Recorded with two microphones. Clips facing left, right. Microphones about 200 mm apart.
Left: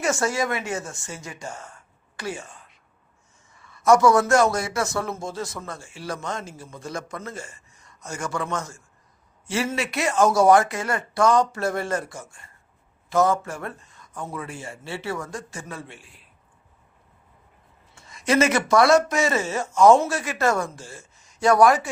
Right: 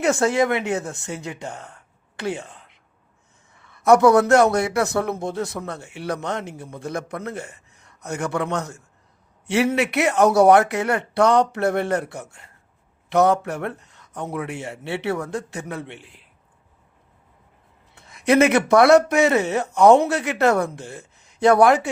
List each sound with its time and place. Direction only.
0.0 s a man's voice: 60° right (ahead or behind)
2.1 s a sound: 60° right (ahead or behind)
3.5 s a man's voice: 60° right (ahead or behind)
17.9 s a man's voice: 60° right (ahead or behind)